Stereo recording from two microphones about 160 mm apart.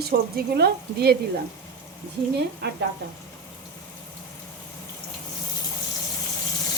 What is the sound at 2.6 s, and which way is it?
Speech, 90° right.